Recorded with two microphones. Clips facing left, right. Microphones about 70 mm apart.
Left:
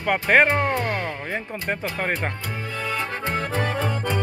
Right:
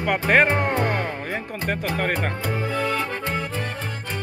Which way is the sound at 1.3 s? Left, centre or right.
Centre.